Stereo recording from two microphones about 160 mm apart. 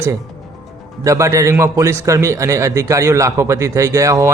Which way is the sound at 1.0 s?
20° right (ahead or behind).